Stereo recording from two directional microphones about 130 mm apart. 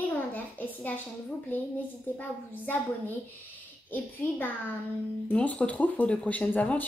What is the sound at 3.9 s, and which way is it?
Speech, 15° left (ahead or behind).